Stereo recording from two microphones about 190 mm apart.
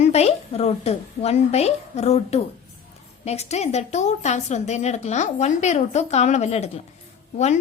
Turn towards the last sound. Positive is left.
turn(degrees=35)  # may be behind; listen again after turning